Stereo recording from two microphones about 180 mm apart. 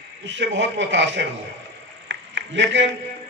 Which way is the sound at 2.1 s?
90° right.